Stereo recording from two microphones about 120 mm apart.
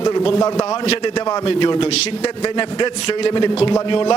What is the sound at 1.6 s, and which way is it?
Speech, 40° left (ahead or behind).